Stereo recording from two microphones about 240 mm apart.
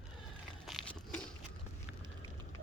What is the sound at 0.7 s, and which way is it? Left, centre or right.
Crumpling, centre.